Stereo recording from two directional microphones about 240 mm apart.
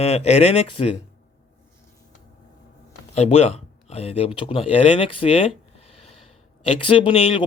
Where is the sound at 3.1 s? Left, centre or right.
Left.